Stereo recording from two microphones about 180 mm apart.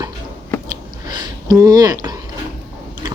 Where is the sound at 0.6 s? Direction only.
20° right (ahead or behind).